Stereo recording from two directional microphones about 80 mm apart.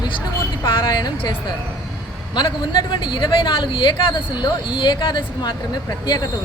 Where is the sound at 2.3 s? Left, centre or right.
Left.